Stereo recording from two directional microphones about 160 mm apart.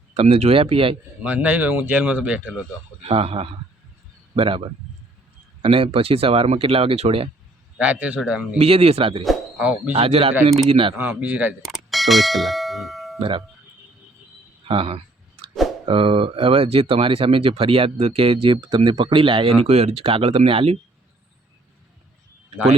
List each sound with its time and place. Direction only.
0.1 s speech: 40° right (ahead or behind)
1.2 s speech: 10° right (ahead or behind)
3.1 s speech: 35° right (ahead or behind)
7.8 s speech: 10° right (ahead or behind)
8.5 s speech: 40° right (ahead or behind)
9.2 s speech: 5° right (ahead or behind)
9.9 s speech: 35° right (ahead or behind)
10.9 s speech: 10° right (ahead or behind)
11.6 s bell: centre (ahead or behind)
13.1 s speech: 35° right (ahead or behind)
14.7 s speech: 35° right (ahead or behind)